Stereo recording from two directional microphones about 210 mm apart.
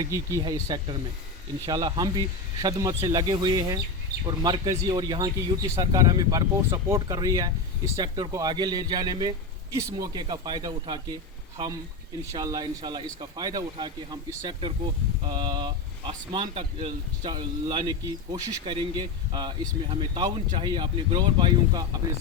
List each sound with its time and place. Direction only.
0.0 s speech: 15° right (ahead or behind)